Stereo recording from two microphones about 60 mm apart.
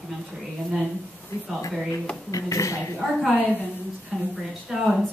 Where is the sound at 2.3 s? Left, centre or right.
Left.